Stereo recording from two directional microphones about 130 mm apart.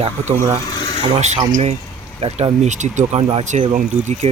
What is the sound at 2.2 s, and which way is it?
Speech, 60° right (ahead or behind).